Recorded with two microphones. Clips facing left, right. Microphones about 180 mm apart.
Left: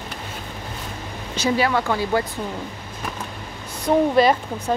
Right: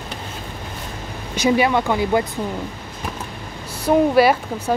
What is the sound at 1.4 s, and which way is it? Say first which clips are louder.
Speech: right 3 dB; 20° right (ahead or behind).